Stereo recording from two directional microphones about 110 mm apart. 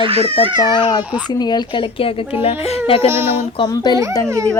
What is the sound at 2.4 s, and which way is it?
Speech, 60° left (ahead or behind).